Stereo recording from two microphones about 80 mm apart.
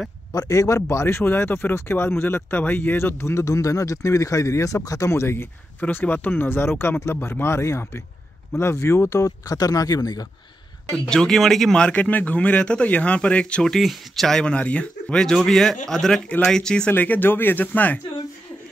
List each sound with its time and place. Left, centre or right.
0.3 s speech: left
10.9 s speech: centre
16.9 s speech: left